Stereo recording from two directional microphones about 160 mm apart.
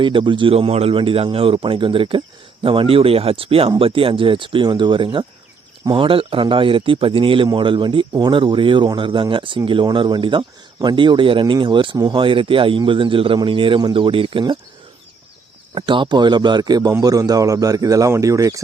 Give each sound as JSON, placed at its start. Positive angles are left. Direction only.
{"t": 0.0, "sound": "speech", "side_deg": -30}
{"t": 15.7, "sound": "a man's voice", "side_deg": -30}